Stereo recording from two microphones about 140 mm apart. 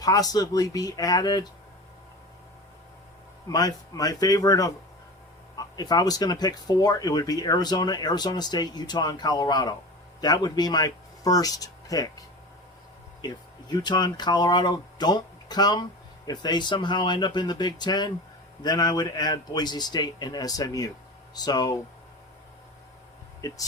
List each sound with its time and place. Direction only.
0.0 s speech: 25° left (ahead or behind)
3.5 s speech: 25° left (ahead or behind)
13.2 s speech: 30° left (ahead or behind)
23.4 s speech: 25° left (ahead or behind)